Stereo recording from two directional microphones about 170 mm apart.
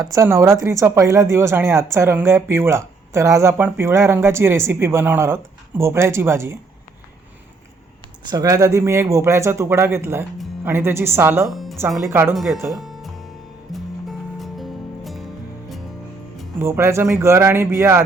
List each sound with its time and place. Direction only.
0.0 s speech: 15° right (ahead or behind)
8.2 s speech: 25° right (ahead or behind)
11.5 s music: centre (ahead or behind)
11.9 s speech: 15° right (ahead or behind)
12.7 s music: centre (ahead or behind)
16.6 s speech: 15° right (ahead or behind)